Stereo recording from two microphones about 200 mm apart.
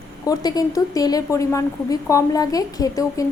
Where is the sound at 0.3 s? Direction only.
20° left (ahead or behind).